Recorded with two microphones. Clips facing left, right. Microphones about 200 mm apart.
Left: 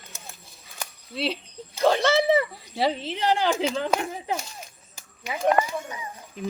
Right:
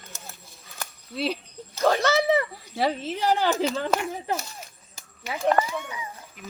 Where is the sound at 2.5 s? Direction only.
Centre (ahead or behind).